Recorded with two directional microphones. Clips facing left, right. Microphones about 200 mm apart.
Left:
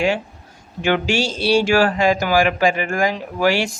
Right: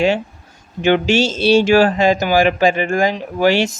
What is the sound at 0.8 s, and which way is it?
Speech, 20° right (ahead or behind).